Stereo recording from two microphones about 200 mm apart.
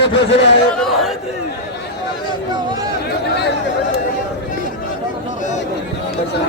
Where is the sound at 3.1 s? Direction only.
55° left (ahead or behind).